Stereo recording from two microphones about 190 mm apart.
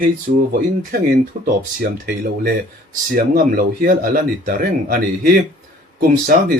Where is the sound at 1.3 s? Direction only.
40° right (ahead or behind).